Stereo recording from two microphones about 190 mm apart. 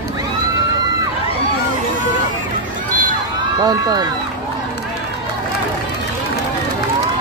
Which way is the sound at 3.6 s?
20° right (ahead or behind).